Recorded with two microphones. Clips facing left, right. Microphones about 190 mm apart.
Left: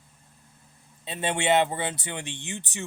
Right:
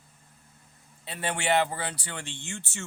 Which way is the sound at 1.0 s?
20° left (ahead or behind).